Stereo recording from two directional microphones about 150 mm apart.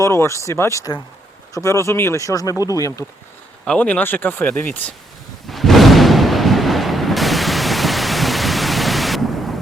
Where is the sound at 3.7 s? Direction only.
10° left (ahead or behind).